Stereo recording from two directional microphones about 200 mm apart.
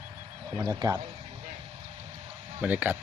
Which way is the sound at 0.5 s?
15° right (ahead or behind).